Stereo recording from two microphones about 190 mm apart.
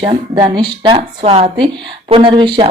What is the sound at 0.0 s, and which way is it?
Speech, 30° right (ahead or behind).